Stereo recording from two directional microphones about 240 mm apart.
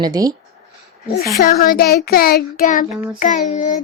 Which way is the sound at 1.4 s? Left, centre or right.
Left.